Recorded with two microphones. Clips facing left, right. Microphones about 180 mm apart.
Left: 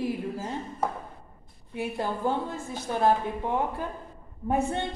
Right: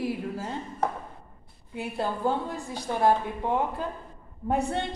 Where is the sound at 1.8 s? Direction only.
15° left (ahead or behind).